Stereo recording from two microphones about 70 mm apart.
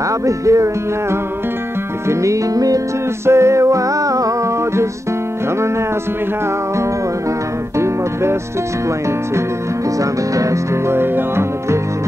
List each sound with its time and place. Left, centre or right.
0.2 s music: right
2.0 s music: right
3.3 s music: right
7.8 s music: right
9.9 s music: right